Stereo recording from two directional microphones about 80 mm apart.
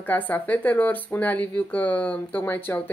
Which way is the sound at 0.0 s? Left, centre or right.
Left.